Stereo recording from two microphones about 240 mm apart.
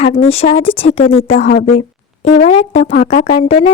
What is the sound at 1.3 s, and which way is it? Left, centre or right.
A woman's voice, left.